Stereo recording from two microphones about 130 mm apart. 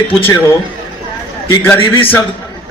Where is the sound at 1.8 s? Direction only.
45° left (ahead or behind).